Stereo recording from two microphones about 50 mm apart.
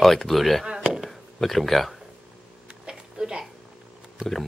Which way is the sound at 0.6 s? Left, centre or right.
Centre.